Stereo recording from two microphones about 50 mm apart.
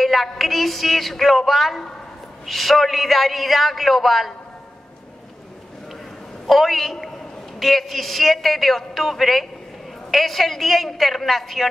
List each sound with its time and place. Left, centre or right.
0.0 s a man's voice: centre
6.4 s a man's voice: centre